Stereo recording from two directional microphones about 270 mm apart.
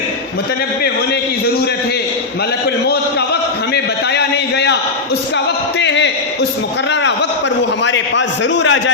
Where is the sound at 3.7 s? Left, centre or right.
Left.